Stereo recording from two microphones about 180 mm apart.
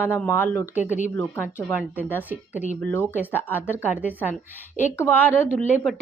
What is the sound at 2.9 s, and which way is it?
Speech, 10° left (ahead or behind).